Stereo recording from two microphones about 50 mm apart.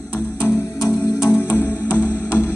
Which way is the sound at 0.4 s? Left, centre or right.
Left.